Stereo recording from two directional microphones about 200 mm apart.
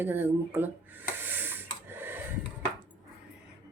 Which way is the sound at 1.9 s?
10° right (ahead or behind).